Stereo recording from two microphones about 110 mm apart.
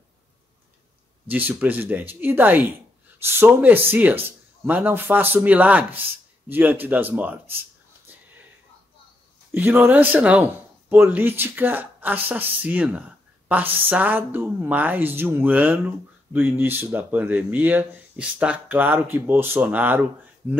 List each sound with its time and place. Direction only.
1.3 s speech: 15° right (ahead or behind)
8.1 s whispering: 15° right (ahead or behind)
9.5 s speech: 20° right (ahead or behind)